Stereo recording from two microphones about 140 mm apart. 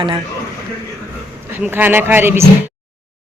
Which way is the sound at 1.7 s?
15° right (ahead or behind).